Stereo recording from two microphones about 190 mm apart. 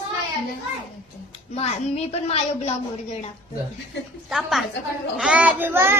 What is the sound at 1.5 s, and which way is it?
A woman's voice, 35° left (ahead or behind).